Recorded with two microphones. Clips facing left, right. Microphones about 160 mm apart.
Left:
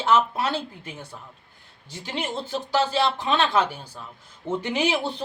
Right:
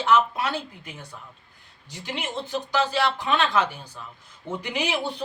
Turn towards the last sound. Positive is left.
turn(degrees=25)  # may be behind; listen again after turning